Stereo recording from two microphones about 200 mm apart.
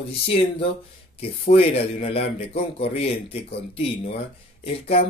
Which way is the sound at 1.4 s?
30° left (ahead or behind).